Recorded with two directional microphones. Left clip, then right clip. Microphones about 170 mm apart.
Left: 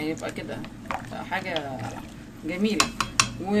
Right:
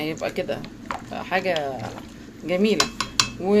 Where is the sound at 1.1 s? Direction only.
45° right (ahead or behind).